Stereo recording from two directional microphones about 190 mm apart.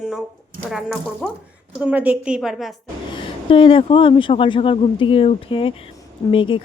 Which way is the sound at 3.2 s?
30° left (ahead or behind).